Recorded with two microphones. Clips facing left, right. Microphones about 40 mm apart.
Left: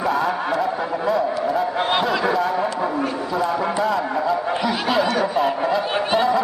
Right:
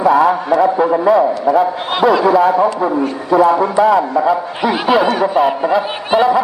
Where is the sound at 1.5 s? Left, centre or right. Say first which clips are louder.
Right 5 dB; centre.